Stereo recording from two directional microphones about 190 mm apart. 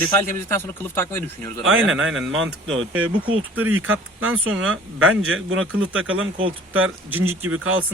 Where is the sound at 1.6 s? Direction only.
90° right.